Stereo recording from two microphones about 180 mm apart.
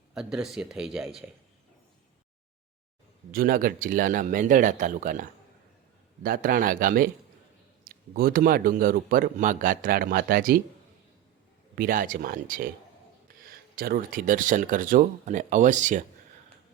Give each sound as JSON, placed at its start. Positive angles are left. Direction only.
{"t": 0.1, "sound": "speech", "side_deg": 0}
{"t": 3.3, "sound": "a man's voice", "side_deg": -50}
{"t": 11.7, "sound": "a man's voice", "side_deg": -50}